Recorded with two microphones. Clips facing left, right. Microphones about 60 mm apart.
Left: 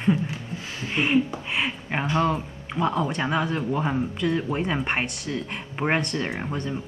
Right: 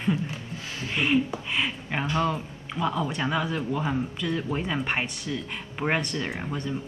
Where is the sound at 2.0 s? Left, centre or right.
Left.